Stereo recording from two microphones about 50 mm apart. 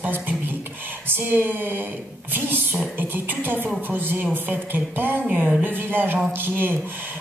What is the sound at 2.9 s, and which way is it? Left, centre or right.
Music, right.